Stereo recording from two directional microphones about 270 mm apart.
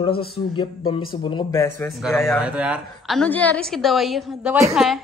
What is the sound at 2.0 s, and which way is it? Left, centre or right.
Speech, centre.